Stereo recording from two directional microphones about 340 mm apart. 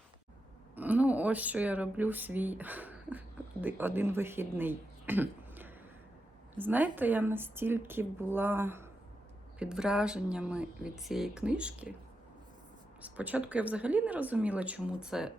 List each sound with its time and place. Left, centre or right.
0.8 s speech: centre
13.0 s speech: centre